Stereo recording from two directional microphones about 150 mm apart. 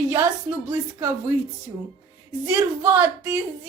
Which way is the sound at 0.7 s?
15° right (ahead or behind).